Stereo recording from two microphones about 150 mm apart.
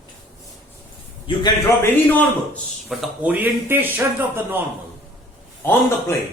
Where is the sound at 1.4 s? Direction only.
25° left (ahead or behind).